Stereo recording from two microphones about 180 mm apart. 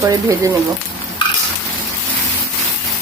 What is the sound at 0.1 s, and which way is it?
Speech, 20° right (ahead or behind).